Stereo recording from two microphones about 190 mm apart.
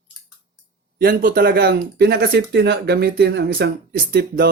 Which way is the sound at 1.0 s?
50° right (ahead or behind).